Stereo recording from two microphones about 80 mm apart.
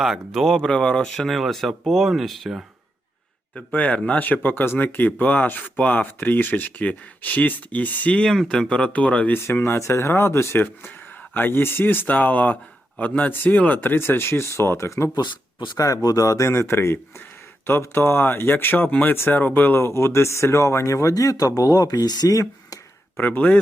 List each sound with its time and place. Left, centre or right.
0.0 s speech: centre
3.5 s speech: centre
9.4 s speech: left
23.1 s speech: left